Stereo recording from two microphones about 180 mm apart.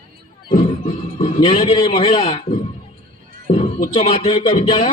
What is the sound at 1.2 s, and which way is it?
A man's voice, 30° left (ahead or behind).